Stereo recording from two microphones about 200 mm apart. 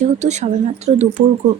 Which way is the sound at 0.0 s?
35° right (ahead or behind).